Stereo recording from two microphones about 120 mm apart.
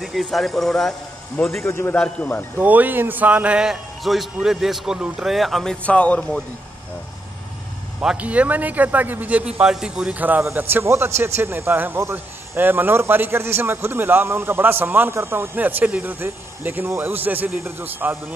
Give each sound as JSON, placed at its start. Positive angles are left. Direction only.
{"t": 0.0, "sound": "speech", "side_deg": 0}
{"t": 1.3, "sound": "a man's voice", "side_deg": 20}
{"t": 2.5, "sound": "speech", "side_deg": -15}
{"t": 8.0, "sound": "a man's voice", "side_deg": -10}